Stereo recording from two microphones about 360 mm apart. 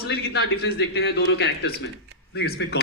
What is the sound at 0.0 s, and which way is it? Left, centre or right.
Speech, left.